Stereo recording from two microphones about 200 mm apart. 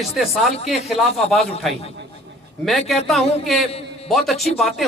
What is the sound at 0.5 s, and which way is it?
Speech, 30° left (ahead or behind).